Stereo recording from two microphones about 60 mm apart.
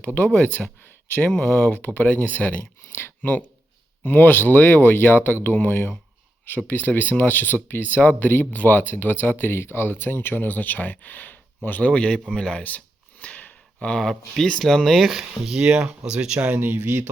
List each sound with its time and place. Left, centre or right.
0.0 s speech: left
11.9 s speech: centre
13.2 s a sound: left
14.0 s speech: centre
14.8 s speech: centre
16.6 s speech: right